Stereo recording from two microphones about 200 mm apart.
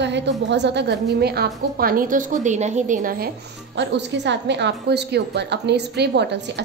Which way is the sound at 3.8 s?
60° right (ahead or behind).